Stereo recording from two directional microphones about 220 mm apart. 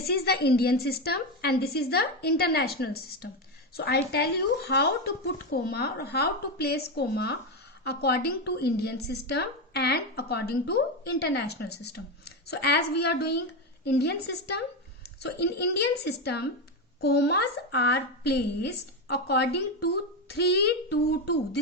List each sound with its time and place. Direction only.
0.0 s a woman's voice: 45° left (ahead or behind)